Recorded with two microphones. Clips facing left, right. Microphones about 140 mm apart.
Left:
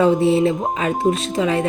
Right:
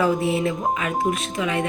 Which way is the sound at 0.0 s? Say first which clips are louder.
Left 6 dB; 30° left (ahead or behind).